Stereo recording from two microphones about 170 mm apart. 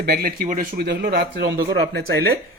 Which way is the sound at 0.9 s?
80° right.